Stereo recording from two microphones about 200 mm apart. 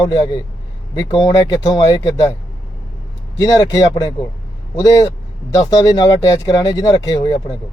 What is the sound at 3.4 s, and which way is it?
Speech, 20° left (ahead or behind).